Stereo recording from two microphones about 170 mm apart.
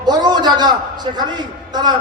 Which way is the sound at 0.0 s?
25° right (ahead or behind).